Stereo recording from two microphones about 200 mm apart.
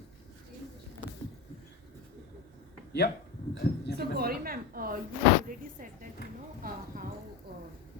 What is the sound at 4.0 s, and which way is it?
A woman's voice, 50° right (ahead or behind).